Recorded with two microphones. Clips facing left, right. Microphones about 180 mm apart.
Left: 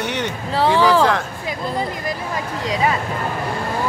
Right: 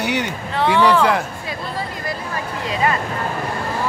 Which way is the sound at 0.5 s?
35° left (ahead or behind).